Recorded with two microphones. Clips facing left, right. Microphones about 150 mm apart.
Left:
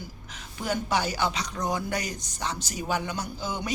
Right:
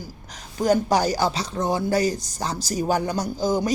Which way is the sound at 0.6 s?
40° right (ahead or behind).